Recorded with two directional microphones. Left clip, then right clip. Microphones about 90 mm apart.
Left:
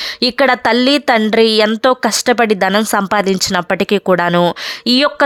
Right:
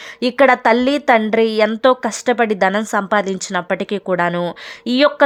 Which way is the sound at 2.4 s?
15° left (ahead or behind).